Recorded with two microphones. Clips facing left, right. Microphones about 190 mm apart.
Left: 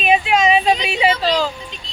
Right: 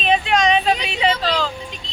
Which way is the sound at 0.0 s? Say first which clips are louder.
Left 2 dB; 5° left (ahead or behind).